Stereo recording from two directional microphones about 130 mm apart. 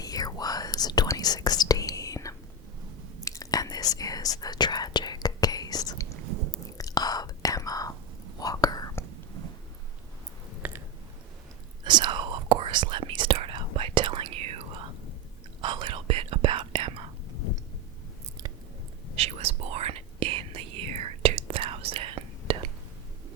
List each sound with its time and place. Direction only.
0.0 s whispering: 30° left (ahead or behind)
10.6 s a sound: 15° right (ahead or behind)
11.9 s whispering: 35° right (ahead or behind)
15.6 s whispering: 40° right (ahead or behind)
19.1 s whispering: 50° right (ahead or behind)